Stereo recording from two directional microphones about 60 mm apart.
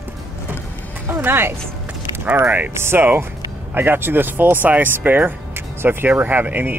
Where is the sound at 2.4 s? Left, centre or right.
Right.